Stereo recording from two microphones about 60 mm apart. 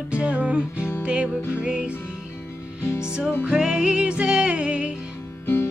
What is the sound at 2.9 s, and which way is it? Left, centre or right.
Music, left.